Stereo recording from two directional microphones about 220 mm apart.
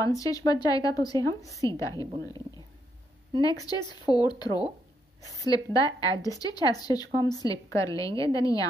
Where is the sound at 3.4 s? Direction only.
15° left (ahead or behind).